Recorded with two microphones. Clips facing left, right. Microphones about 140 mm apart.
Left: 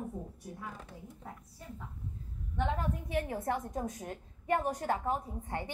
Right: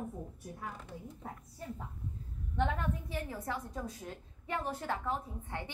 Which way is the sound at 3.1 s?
55° left (ahead or behind).